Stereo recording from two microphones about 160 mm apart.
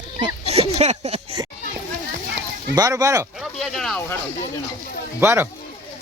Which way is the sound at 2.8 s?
20° right (ahead or behind).